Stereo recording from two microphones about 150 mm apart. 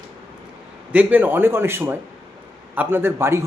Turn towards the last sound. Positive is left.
turn(degrees=-15)  # may be behind; listen again after turning